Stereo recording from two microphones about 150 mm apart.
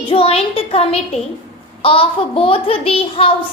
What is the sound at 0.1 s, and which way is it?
A child's voice, 40° left (ahead or behind).